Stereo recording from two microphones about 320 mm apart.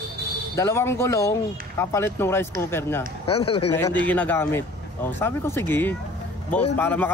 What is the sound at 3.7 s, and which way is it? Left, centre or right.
Speech, centre.